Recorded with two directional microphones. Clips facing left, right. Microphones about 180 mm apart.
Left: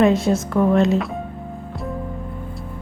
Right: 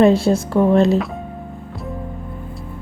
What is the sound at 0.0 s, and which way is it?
Speech, 35° right (ahead or behind).